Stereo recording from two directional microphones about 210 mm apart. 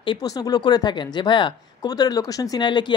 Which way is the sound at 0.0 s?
20° left (ahead or behind).